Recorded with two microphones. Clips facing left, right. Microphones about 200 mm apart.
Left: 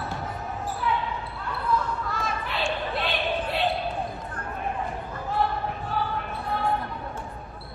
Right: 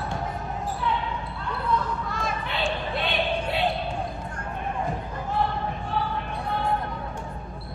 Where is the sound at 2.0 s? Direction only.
Centre (ahead or behind).